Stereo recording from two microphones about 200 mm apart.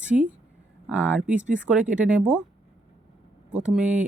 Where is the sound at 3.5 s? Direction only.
5° right (ahead or behind).